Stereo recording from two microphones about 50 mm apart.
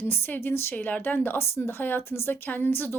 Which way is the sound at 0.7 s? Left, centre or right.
Left.